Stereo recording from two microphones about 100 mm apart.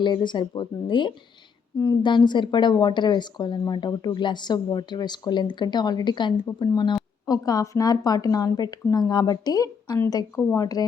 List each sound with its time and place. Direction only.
0.0 s a woman's voice: 50° left (ahead or behind)
6.9 s a woman's voice: 40° left (ahead or behind)